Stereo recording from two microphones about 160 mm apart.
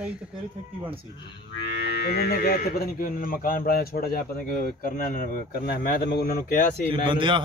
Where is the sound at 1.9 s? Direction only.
85° left; by 6.6 s 65° left (ahead or behind).